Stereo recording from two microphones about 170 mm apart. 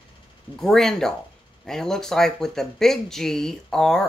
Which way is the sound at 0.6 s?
Centre (ahead or behind).